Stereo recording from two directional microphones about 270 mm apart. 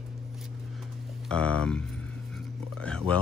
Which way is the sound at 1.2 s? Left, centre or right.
Centre.